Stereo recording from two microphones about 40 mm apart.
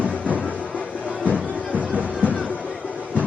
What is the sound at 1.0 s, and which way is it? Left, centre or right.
Music, right.